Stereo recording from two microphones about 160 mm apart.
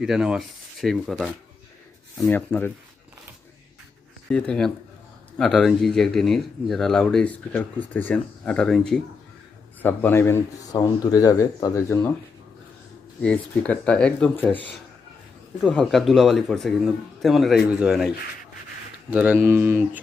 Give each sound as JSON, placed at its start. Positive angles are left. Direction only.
{"t": 0.0, "sound": "speech", "side_deg": -5}
{"t": 2.3, "sound": "speech", "side_deg": 15}
{"t": 4.3, "sound": "a man's voice", "side_deg": 5}
{"t": 13.2, "sound": "speech", "side_deg": 5}
{"t": 15.6, "sound": "speech", "side_deg": 5}
{"t": 19.1, "sound": "speech", "side_deg": -10}